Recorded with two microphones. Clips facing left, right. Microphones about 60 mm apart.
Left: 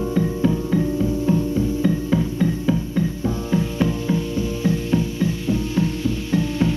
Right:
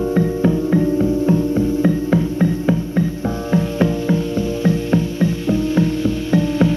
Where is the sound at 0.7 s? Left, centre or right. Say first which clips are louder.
Right 5 dB; right.